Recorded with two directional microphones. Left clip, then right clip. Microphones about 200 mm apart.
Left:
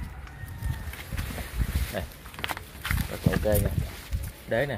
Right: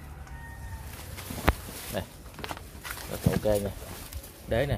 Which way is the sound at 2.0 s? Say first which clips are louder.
Even; 10° right (ahead or behind).